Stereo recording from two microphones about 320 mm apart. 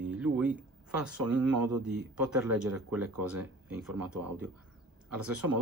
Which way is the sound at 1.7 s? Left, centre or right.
Right.